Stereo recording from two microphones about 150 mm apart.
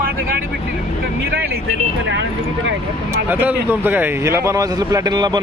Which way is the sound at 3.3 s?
10° right (ahead or behind).